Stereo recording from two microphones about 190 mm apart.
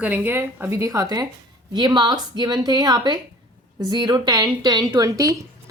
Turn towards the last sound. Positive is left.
turn(degrees=-20)  # may be behind; listen again after turning